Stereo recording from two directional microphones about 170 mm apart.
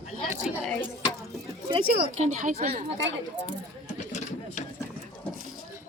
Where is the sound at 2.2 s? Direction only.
45° right (ahead or behind).